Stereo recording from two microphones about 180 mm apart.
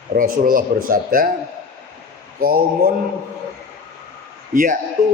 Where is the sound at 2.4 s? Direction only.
55° right (ahead or behind).